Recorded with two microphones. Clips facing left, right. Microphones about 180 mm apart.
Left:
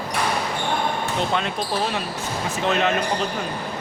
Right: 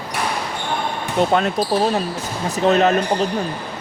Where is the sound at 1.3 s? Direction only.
40° right (ahead or behind).